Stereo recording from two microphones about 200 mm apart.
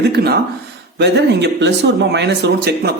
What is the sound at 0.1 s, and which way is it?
Speech, 50° right (ahead or behind).